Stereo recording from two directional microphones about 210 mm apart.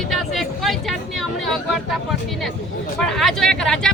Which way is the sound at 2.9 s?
Centre (ahead or behind).